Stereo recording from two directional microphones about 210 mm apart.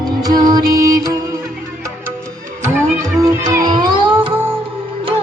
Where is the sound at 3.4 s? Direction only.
20° right (ahead or behind).